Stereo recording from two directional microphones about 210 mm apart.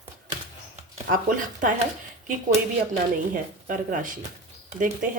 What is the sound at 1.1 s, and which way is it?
Speech, 40° right (ahead or behind).